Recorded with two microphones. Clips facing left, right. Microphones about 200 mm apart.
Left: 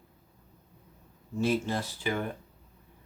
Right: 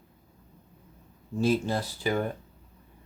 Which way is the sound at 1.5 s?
35° right (ahead or behind).